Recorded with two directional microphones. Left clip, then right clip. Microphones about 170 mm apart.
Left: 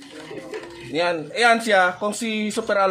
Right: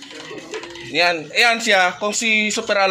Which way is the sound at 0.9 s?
20° left (ahead or behind).